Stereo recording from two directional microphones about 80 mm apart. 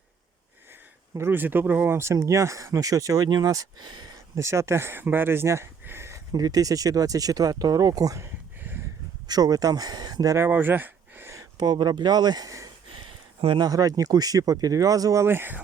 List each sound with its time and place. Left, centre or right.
1.2 s speech: right
4.4 s speech: right
6.3 s speech: right
8.6 s a sound: right
9.2 s speech: right
10.3 s speech: right
11.5 s speech: right
15.3 s speech: right